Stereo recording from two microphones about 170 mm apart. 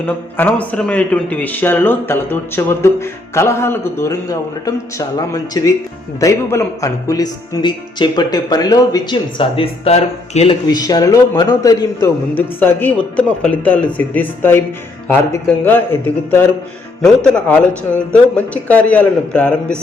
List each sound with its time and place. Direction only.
0.0 s a man's voice: 10° left (ahead or behind); by 10.6 s 35° left (ahead or behind)
10.7 s a man's voice: 25° left (ahead or behind); by 19.7 s 5° left (ahead or behind)